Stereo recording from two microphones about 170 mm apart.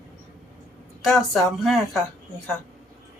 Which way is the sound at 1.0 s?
Centre (ahead or behind).